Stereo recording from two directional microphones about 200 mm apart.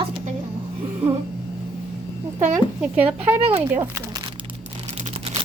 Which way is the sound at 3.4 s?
30° right (ahead or behind).